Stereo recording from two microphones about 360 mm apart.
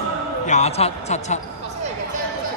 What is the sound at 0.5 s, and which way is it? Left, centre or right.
Speech, centre.